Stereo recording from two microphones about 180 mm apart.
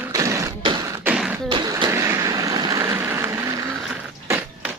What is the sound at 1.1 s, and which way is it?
Beatboxing, 5° right (ahead or behind).